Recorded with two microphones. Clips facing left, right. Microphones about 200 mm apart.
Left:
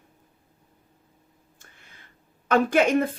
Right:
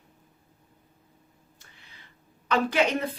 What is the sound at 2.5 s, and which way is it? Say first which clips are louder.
Speech: left 4 dB; 50° left (ahead or behind).